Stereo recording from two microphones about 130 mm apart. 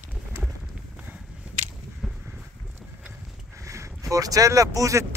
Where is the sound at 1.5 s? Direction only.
10° right (ahead or behind).